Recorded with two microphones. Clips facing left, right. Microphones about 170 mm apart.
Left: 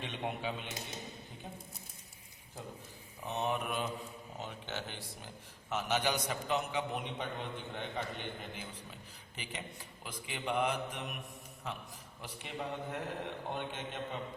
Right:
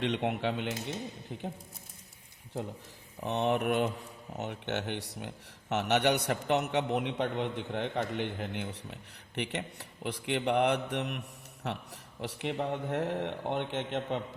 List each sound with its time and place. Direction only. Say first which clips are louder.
0.0 s speech: right 8 dB; 80° right
3.2 s speech: right 7 dB; 70° right (ahead or behind)